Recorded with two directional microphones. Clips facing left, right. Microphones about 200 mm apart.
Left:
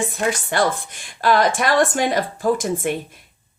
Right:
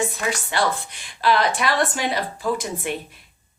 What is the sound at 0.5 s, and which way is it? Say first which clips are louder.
Speech: left 3 dB; 50° left (ahead or behind).